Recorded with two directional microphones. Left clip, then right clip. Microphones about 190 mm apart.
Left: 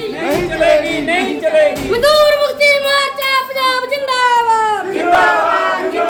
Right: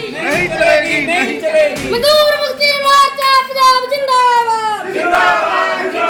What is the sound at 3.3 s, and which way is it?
Speech, 25° left (ahead or behind).